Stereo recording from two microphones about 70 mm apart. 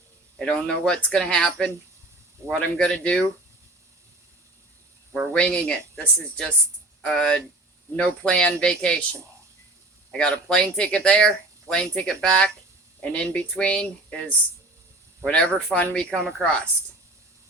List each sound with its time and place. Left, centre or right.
0.3 s speech: centre
5.3 s speech: centre
10.1 s speech: centre